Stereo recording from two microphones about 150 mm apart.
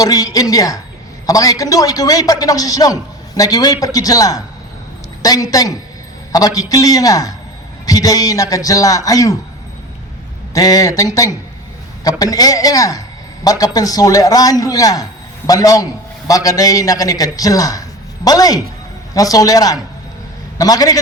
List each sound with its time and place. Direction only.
0.0 s a man's voice: 25° left (ahead or behind)
10.5 s a man's voice: 25° left (ahead or behind)